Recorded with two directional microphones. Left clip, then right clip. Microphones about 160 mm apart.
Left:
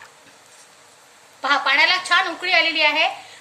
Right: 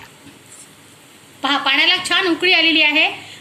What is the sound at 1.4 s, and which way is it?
A woman's voice, 70° left (ahead or behind).